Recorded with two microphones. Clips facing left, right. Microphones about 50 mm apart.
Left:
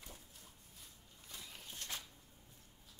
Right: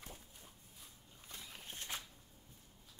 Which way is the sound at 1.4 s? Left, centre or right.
Centre.